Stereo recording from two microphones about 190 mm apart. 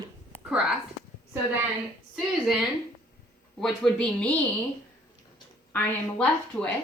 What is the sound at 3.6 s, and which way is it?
Speech, 5° left (ahead or behind).